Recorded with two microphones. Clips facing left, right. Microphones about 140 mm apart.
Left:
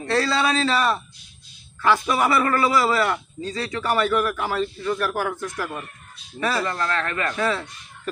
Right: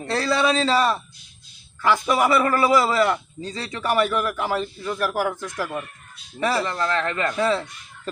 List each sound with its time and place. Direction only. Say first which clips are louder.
0.2 s a man's voice: right 2 dB; 20° right (ahead or behind)